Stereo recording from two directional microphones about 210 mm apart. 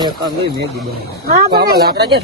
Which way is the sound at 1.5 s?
50° right (ahead or behind).